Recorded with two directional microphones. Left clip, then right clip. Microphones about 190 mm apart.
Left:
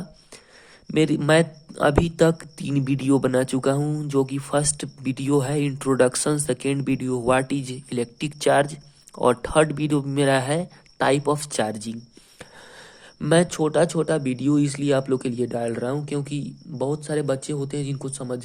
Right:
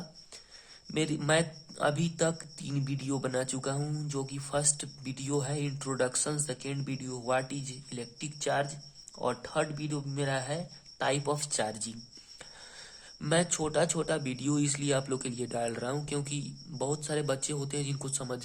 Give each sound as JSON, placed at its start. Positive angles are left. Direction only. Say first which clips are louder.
{"t": 0.9, "sound": "speech", "louder": "left 10 dB", "side_deg": 35}
{"t": 13.1, "sound": "speech", "louder": "left 10 dB", "side_deg": 30}